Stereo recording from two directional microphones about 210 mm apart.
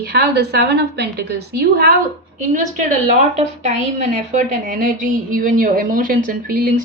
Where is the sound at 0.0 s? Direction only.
50° right (ahead or behind).